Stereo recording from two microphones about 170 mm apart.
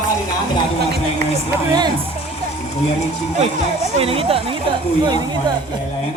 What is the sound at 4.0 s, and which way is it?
Speech, 35° right (ahead or behind).